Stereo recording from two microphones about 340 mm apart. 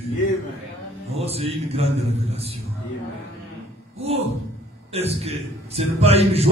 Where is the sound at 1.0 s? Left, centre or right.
Centre.